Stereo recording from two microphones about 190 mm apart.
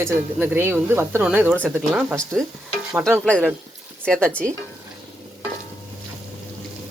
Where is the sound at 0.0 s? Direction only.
10° right (ahead or behind).